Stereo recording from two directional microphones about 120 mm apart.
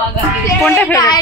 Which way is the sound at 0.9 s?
30° left (ahead or behind).